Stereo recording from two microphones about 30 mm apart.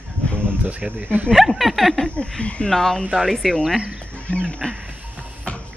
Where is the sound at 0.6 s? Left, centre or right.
Right.